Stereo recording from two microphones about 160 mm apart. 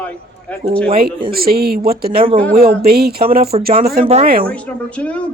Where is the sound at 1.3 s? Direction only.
70° right (ahead or behind).